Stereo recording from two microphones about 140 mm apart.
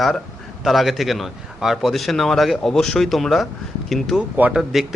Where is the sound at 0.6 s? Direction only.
Centre (ahead or behind).